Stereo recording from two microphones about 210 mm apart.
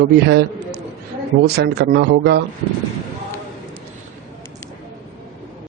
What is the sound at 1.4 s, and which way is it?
Speech, 50° right (ahead or behind).